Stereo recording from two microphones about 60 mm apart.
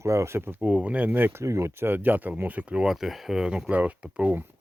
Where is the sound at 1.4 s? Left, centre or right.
Right.